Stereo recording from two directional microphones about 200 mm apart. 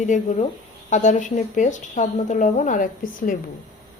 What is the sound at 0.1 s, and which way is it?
A woman's voice, 35° left (ahead or behind).